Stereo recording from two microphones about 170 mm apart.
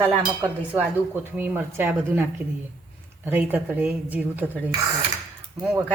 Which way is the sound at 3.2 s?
10° right (ahead or behind).